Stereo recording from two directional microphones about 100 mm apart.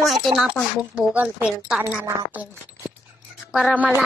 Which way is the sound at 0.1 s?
Centre (ahead or behind).